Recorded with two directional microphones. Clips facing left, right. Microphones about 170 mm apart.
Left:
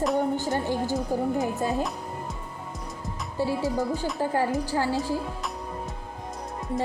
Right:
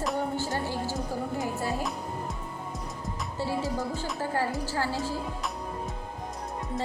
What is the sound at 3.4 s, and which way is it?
Speech, 15° left (ahead or behind).